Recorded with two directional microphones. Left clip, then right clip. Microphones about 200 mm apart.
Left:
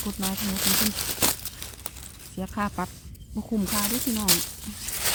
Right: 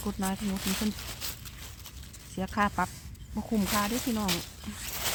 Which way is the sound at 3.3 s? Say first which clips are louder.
Left 1 dB; centre (ahead or behind).